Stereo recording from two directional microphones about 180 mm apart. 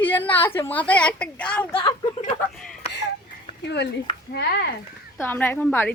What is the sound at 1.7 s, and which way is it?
Speech, 30° left (ahead or behind).